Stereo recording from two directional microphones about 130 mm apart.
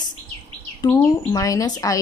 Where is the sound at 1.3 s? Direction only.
25° left (ahead or behind).